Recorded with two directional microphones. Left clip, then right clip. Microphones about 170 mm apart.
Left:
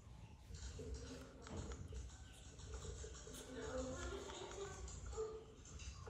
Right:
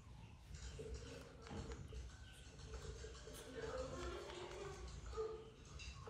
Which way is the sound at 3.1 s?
Centre (ahead or behind).